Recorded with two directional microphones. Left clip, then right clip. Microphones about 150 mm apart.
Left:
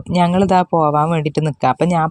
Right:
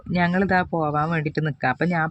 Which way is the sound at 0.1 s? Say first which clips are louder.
Left 7 dB; 40° left (ahead or behind).